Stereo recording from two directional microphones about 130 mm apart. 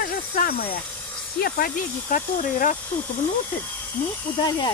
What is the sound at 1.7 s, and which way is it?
Speech, 90° left.